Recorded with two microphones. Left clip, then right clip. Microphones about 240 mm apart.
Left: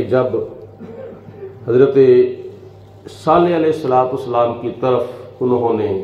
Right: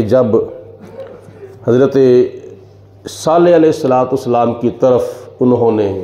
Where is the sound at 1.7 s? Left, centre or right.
Right.